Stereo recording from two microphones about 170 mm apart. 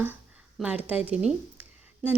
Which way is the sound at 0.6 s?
10° right (ahead or behind).